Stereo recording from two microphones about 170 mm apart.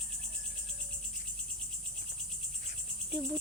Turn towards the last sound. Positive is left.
turn(degrees=-20)  # may be behind; listen again after turning